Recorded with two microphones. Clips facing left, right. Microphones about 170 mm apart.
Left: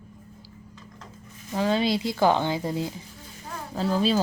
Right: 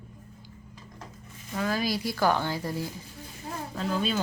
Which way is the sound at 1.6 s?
25° left (ahead or behind).